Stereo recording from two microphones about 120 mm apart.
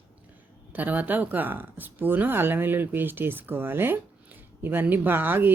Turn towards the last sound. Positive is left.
turn(degrees=-15)  # may be behind; listen again after turning